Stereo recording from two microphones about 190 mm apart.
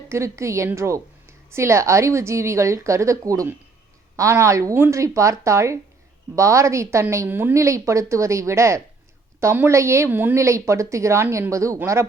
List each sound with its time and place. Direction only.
0.1 s a woman's voice: 15° right (ahead or behind)